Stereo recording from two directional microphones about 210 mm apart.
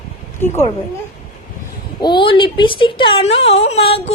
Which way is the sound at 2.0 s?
20° left (ahead or behind).